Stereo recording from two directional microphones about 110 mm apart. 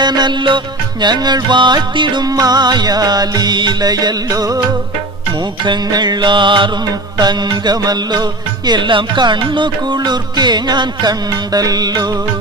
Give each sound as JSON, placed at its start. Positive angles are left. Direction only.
{"t": 0.0, "sound": "music", "side_deg": -40}
{"t": 5.6, "sound": "music", "side_deg": -40}